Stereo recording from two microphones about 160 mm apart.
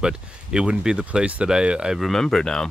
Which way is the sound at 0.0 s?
5° right (ahead or behind).